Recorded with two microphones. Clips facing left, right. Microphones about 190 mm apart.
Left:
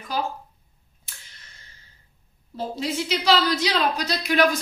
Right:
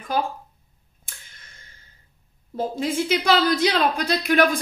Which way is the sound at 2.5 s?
50° right (ahead or behind).